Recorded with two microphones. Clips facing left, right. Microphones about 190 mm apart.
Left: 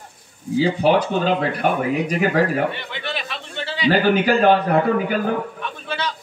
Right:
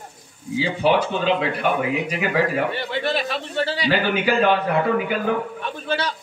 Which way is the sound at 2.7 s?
35° right (ahead or behind).